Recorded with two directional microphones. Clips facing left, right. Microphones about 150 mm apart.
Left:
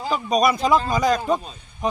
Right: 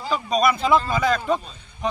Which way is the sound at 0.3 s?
40° left (ahead or behind).